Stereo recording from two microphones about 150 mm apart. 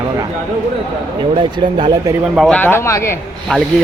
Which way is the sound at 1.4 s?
30° right (ahead or behind).